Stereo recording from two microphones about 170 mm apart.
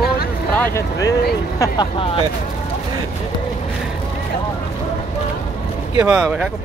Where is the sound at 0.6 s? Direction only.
20° left (ahead or behind).